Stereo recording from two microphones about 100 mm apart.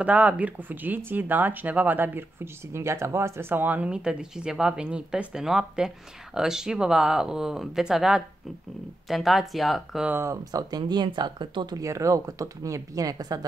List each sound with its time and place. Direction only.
0.0 s speech: 15° right (ahead or behind)
10.0 s speech: 20° right (ahead or behind)
10.3 s speech: 40° right (ahead or behind)
11.8 s speech: 30° right (ahead or behind)